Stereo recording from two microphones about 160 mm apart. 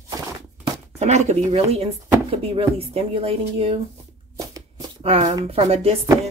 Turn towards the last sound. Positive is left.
turn(degrees=-40)  # may be behind; listen again after turning